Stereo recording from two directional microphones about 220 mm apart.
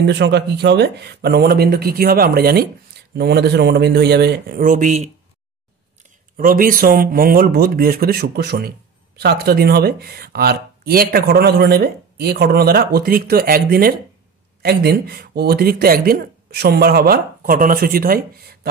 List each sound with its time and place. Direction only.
0.0 s speech: 50° right (ahead or behind); by 5.1 s 35° right (ahead or behind)
6.3 s speech: 40° right (ahead or behind)